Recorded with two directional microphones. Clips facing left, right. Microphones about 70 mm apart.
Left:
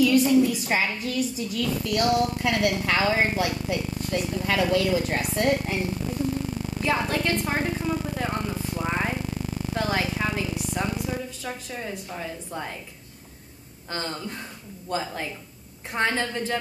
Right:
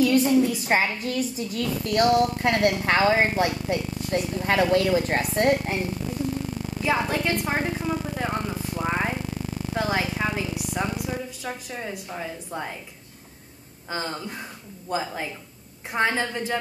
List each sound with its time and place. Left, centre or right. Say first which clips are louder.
0.0 s a woman's voice: even; right
6.8 s a woman's voice: right 1 dB; centre
13.8 s a woman's voice: right 1 dB; centre